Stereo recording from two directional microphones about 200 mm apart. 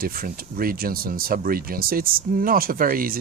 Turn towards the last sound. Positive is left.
turn(degrees=-45)  # may be behind; listen again after turning